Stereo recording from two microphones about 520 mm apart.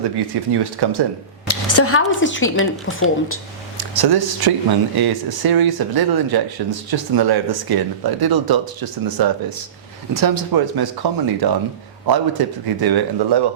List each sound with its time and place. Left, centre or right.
0.5 s speech: right
1.5 s speech: left
3.8 s speech: right